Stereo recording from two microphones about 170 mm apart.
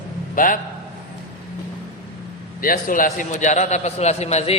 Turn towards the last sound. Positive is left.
turn(degrees=40)  # may be behind; listen again after turning